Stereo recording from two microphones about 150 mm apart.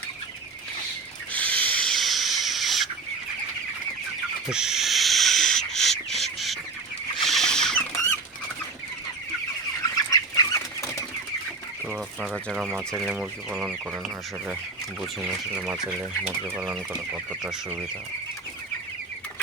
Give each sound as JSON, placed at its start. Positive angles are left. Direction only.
{"t": 1.3, "sound": "owl", "side_deg": 10}
{"t": 1.8, "sound": "a sound", "side_deg": 0}
{"t": 4.4, "sound": "owl", "side_deg": -5}
{"t": 7.2, "sound": "rodents", "side_deg": 0}
{"t": 10.1, "sound": "chicken", "side_deg": 20}
{"t": 11.9, "sound": "speech", "side_deg": -5}
{"t": 13.1, "sound": "speech", "side_deg": -10}
{"t": 15.2, "sound": "speech", "side_deg": -10}